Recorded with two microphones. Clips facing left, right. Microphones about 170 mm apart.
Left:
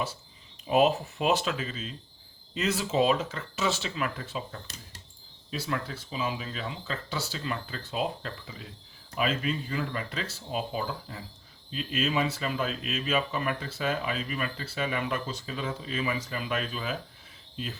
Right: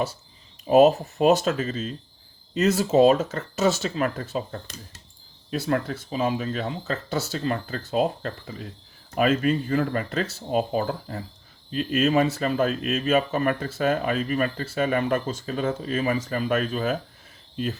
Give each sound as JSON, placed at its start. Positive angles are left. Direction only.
{"t": 0.7, "sound": "speech", "side_deg": -40}